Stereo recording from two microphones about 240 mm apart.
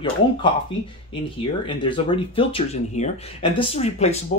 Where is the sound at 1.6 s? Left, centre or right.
Left.